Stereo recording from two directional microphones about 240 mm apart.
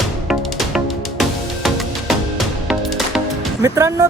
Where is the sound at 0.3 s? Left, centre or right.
Centre.